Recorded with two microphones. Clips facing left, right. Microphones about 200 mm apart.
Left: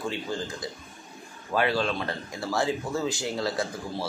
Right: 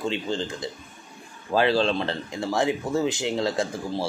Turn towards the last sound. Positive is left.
turn(degrees=-25)  # may be behind; listen again after turning